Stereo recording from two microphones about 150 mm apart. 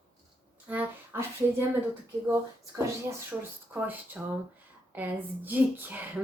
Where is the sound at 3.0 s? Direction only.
10° right (ahead or behind).